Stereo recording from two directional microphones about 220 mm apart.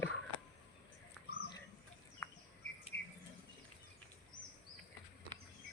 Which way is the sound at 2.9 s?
50° left (ahead or behind).